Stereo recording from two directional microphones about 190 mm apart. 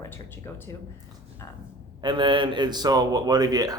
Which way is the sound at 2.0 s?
25° right (ahead or behind).